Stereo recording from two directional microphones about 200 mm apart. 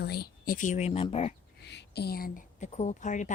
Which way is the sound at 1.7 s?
55° left (ahead or behind).